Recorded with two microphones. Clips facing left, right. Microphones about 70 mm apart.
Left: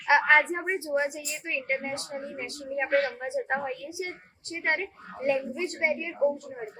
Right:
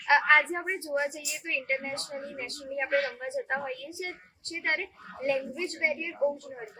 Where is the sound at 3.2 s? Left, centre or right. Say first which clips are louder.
Left 2 dB; left.